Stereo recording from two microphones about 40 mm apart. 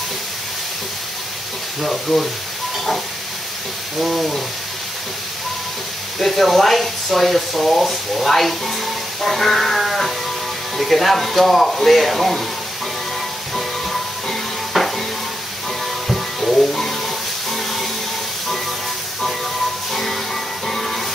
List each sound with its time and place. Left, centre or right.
1.8 s speech: centre
4.0 s speech: centre
6.1 s speech: centre
14.7 s stir: centre
16.1 s music: centre
19.9 s music: centre